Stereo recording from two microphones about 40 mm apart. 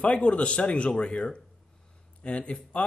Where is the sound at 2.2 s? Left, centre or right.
Left.